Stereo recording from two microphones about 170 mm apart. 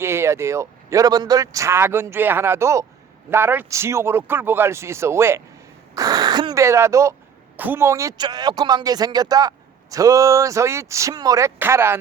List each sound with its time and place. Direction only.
0.0 s a man's voice: 15° right (ahead or behind)